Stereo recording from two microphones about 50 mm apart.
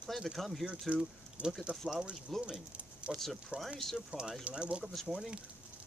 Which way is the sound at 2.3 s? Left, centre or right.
Centre.